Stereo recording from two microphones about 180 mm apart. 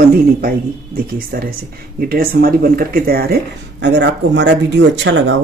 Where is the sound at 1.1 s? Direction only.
55° right (ahead or behind); by 5.4 s 90° right.